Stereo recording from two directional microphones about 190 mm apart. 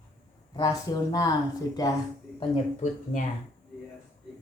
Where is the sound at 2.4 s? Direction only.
35° left (ahead or behind).